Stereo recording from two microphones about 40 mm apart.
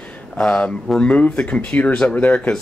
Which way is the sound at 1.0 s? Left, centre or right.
Left.